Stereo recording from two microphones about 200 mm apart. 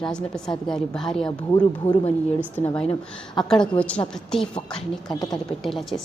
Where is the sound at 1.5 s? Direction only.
25° left (ahead or behind).